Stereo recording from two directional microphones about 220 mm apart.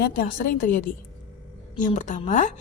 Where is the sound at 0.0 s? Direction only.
40° left (ahead or behind).